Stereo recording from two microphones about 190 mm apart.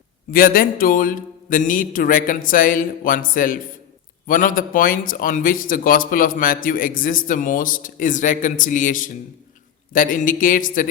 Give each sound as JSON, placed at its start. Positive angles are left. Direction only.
{"t": 0.3, "sound": "speech", "side_deg": 50}